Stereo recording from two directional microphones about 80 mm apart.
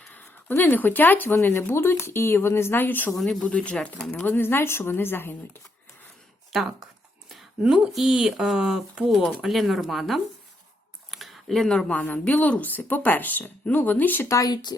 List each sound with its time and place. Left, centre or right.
0.1 s speech: left
3.4 s speech: centre
4.1 s speech: left
7.6 s speech: centre; by 14.3 s left
14.3 s speech: left